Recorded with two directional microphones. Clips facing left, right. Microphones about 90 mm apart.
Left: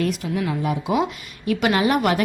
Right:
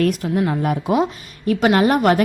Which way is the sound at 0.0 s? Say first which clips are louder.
Right 5 dB; 45° right (ahead or behind).